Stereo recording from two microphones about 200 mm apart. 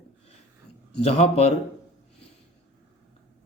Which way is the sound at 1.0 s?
30° left (ahead or behind).